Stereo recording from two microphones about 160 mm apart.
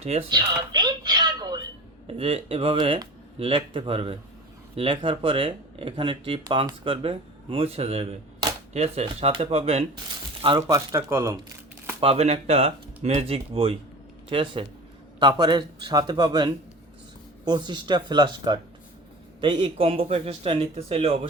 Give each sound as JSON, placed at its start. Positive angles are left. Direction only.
{"t": 0.3, "sound": "a sound", "side_deg": -25}
{"t": 2.0, "sound": "speech", "side_deg": -40}
{"t": 10.7, "sound": "speech", "side_deg": -20}
{"t": 11.9, "sound": "speech", "side_deg": -40}